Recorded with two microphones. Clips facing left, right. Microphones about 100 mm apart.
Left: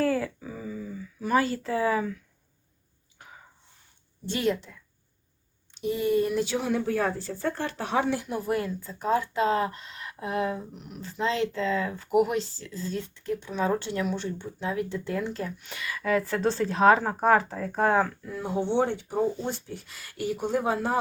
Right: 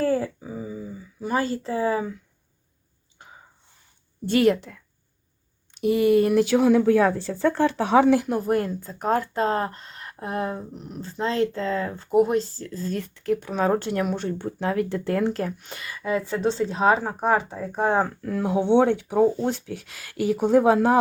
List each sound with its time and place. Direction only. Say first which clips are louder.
0.0 s a sound: right 3 dB; 25° right (ahead or behind)
4.3 s speech: right 8 dB; 60° right (ahead or behind)
5.8 s speech: right 6 dB; 70° right (ahead or behind); by 8.3 s 90° right
8.3 s speech: right 5 dB; 45° right (ahead or behind)
13.2 s speech: right 5 dB; 60° right (ahead or behind)
15.6 s speech: even; 35° right (ahead or behind)
18.2 s speech: right 6 dB; 80° right
18.6 s speech: right 7 dB; 60° right (ahead or behind); by 21.0 s 90° right